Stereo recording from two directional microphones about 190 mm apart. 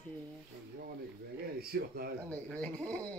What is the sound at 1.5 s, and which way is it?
Speech, 55° right (ahead or behind).